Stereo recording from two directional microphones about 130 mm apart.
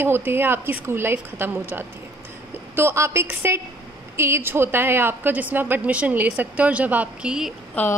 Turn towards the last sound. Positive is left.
turn(degrees=10)  # may be behind; listen again after turning